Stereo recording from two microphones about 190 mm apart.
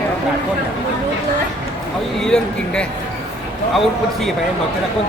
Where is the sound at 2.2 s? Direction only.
5° left (ahead or behind).